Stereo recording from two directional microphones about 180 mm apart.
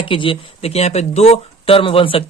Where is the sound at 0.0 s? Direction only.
30° left (ahead or behind).